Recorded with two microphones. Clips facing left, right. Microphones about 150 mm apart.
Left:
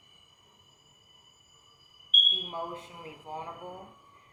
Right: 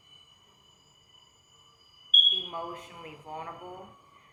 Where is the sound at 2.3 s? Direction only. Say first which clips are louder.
Left 1 dB; 30° left (ahead or behind).